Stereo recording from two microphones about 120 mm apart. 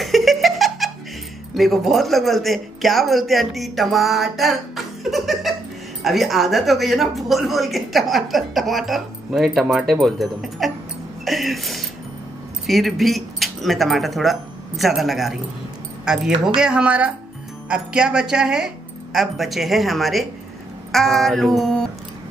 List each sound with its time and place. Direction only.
0.0 s giggle: centre (ahead or behind)
1.5 s speech: centre (ahead or behind)